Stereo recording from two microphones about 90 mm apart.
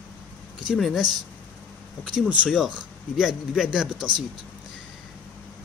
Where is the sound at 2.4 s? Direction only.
Centre (ahead or behind).